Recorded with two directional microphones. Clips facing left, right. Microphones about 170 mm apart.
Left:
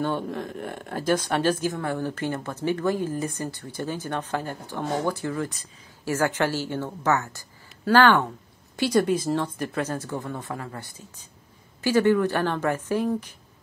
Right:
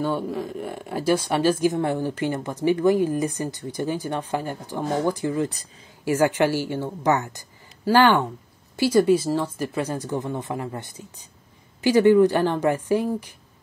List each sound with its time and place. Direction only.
0.0 s speech: 5° right (ahead or behind)
1.7 s speech: 20° right (ahead or behind)